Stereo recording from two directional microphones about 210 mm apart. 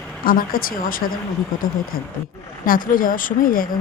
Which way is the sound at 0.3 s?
40° left (ahead or behind).